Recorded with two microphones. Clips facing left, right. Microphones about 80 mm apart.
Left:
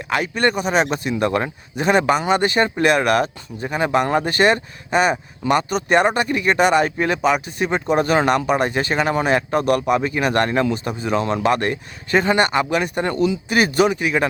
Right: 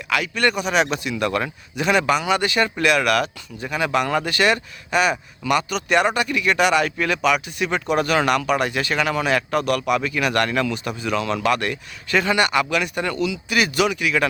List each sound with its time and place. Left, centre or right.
0.1 s speech: left